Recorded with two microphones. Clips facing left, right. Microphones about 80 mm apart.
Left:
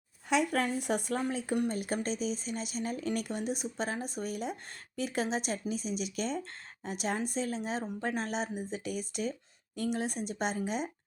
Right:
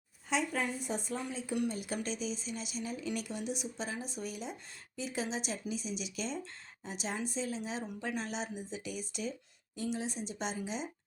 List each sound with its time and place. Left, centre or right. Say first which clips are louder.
0.3 s speech: left 5 dB; left
1.5 s speech: left 1 dB; left